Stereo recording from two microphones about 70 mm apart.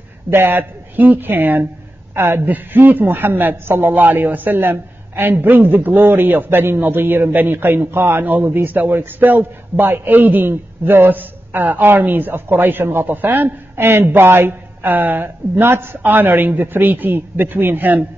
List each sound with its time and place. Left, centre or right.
0.3 s a man's voice: right